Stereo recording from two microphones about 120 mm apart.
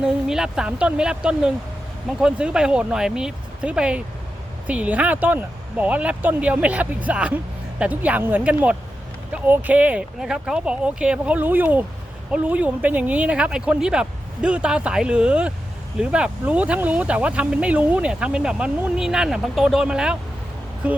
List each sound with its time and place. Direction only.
0.0 s speech: 5° right (ahead or behind)